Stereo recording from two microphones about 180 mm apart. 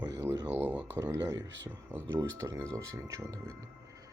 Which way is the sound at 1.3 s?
90° right.